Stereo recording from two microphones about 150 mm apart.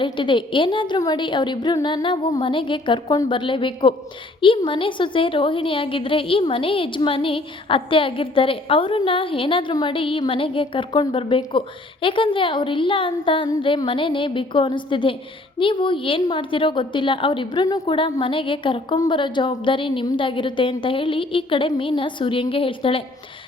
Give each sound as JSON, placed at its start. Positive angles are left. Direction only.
{"t": 0.0, "sound": "a woman's voice", "side_deg": 35}